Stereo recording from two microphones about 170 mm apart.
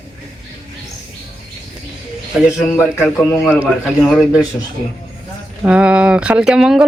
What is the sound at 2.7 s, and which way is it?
A man's voice, 10° left (ahead or behind).